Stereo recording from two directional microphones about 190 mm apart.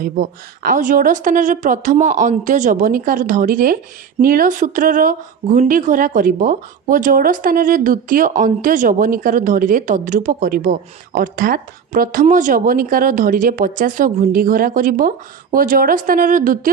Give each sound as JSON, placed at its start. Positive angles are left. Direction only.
{"t": 0.0, "sound": "a woman's voice", "side_deg": -50}